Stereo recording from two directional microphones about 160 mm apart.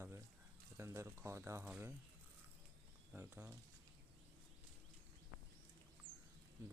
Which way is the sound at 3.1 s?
15° right (ahead or behind).